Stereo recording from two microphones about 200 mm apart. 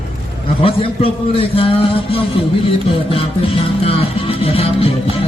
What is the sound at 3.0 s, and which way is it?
Music, 30° left (ahead or behind).